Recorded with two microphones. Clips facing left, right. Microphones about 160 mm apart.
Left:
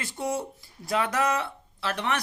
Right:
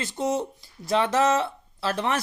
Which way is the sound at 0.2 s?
20° right (ahead or behind).